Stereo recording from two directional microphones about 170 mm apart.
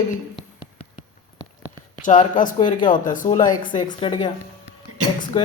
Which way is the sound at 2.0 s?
50° left (ahead or behind).